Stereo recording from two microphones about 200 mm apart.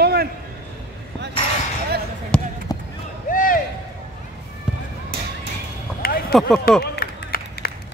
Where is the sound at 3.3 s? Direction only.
45° left (ahead or behind).